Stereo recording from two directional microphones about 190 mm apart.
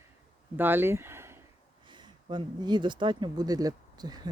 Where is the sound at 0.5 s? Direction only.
10° right (ahead or behind).